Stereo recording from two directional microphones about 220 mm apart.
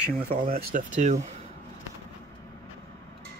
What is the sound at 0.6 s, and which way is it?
Speech, 35° right (ahead or behind).